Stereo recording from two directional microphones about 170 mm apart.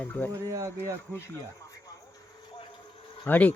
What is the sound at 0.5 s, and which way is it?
Speech, 20° right (ahead or behind).